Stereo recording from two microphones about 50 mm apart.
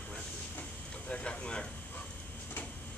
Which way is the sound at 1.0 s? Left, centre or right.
Centre.